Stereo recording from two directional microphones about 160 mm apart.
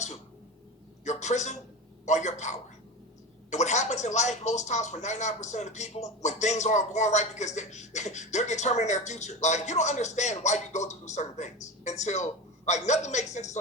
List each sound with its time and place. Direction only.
1.0 s speech: 45° left (ahead or behind)